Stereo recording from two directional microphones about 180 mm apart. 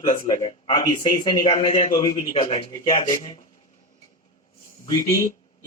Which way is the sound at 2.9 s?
45° left (ahead or behind).